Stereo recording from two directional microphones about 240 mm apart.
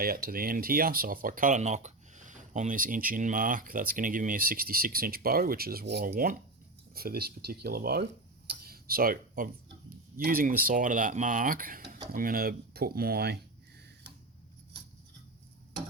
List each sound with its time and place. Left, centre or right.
0.0 s speech: right
8.4 s a sound: right
10.2 s speech: right